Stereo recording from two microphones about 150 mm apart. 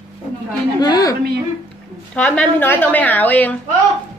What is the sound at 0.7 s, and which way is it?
Speech, 25° left (ahead or behind).